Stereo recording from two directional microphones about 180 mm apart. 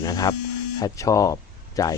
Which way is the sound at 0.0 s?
20° left (ahead or behind).